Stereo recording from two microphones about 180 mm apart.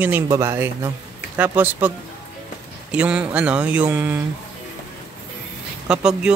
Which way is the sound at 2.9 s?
5° right (ahead or behind).